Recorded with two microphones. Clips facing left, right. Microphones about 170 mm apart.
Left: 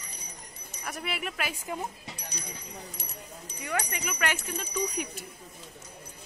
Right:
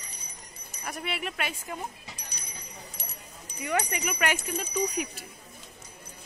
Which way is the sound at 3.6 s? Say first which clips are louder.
Right 4 dB; 20° right (ahead or behind).